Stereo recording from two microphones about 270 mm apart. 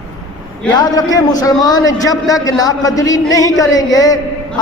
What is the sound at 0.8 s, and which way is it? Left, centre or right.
A man's voice, centre.